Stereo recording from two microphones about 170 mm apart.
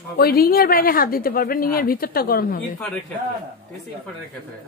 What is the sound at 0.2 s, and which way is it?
A woman's voice, 60° left (ahead or behind).